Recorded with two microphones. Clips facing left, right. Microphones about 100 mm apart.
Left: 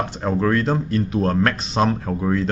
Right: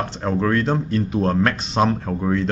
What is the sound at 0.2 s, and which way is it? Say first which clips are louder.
Speech: even; centre (ahead or behind).